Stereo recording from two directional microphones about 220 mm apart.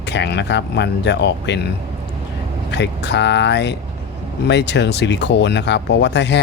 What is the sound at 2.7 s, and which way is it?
Speech, 50° left (ahead or behind).